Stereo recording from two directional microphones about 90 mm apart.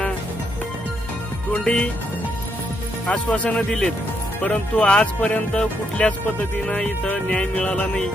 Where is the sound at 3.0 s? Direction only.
15° left (ahead or behind).